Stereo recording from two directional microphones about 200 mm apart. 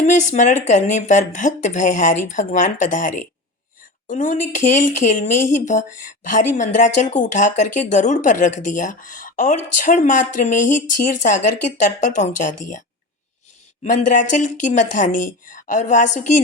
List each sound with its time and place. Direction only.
0.0 s speech: 35° left (ahead or behind)
13.8 s speech: 40° left (ahead or behind)